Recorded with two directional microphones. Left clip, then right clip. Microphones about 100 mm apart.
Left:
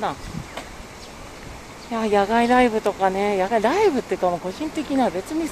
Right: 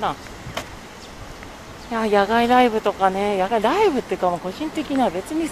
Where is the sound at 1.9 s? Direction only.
Centre (ahead or behind).